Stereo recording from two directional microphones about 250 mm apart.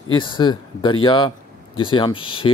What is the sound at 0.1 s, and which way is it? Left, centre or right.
A man's voice, centre.